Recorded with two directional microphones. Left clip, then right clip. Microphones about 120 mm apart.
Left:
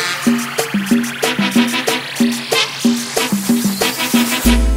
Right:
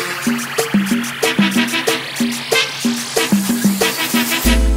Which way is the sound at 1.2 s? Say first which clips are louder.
Right 1 dB; 25° left (ahead or behind).